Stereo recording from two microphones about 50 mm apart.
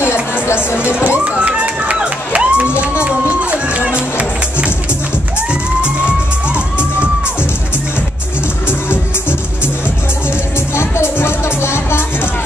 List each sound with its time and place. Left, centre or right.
0.0 s music: left
1.0 s crowd: right
3.0 s music: right
10.7 s music: left